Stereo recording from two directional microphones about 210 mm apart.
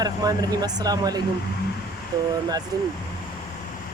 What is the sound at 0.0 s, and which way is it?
Speech, 20° right (ahead or behind).